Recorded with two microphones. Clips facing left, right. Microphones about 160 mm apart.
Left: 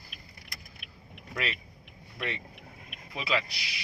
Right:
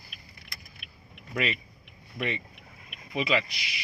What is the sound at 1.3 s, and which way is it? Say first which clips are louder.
Speech: right 5 dB; 15° right (ahead or behind).